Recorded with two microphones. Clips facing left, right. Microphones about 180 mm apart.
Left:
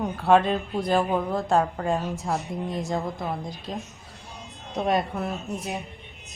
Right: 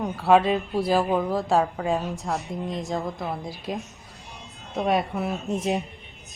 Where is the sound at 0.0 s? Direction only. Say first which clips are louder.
Right 1 dB; centre (ahead or behind).